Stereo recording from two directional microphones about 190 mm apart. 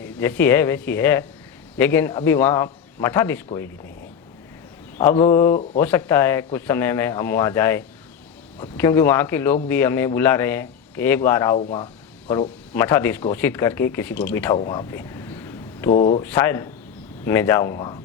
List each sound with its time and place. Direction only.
0.0 s speech: 10° left (ahead or behind)
4.9 s speech: 10° left (ahead or behind)
12.7 s speech: 10° left (ahead or behind)
15.9 s speech: 40° left (ahead or behind)
16.2 s speech: 10° left (ahead or behind)